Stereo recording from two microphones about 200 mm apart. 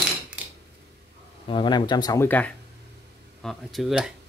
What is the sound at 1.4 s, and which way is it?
Speech, 25° left (ahead or behind).